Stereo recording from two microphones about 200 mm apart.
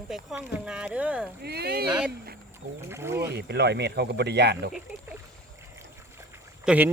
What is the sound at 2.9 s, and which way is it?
Speech, 15° right (ahead or behind).